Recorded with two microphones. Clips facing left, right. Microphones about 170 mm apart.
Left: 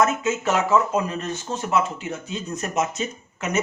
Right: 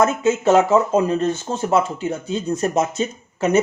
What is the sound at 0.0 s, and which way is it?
Speech, 30° right (ahead or behind).